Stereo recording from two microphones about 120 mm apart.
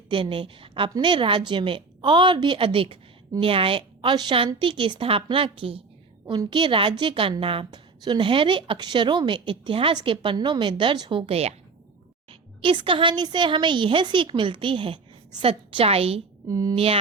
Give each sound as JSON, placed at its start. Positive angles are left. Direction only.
{"t": 0.1, "sound": "a woman's voice", "side_deg": -45}
{"t": 6.2, "sound": "a woman's voice", "side_deg": -35}
{"t": 12.3, "sound": "a woman's voice", "side_deg": -45}
{"t": 16.5, "sound": "speech", "side_deg": -30}
{"t": 16.7, "sound": "mantra", "side_deg": -55}